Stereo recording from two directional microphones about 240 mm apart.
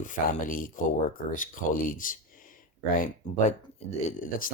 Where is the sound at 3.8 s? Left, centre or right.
Left.